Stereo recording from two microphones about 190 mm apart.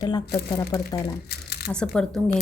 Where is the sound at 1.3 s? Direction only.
55° left (ahead or behind).